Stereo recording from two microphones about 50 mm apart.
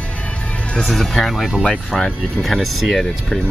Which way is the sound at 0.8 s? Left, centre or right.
Centre.